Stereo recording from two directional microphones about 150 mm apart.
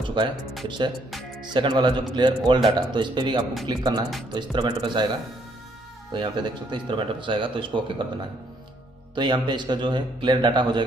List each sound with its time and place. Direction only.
0.0 s music: 30° right (ahead or behind)
0.7 s a man's voice: 30° right (ahead or behind)
6.1 s a man's voice: 30° right (ahead or behind)
9.1 s a man's voice: 30° right (ahead or behind)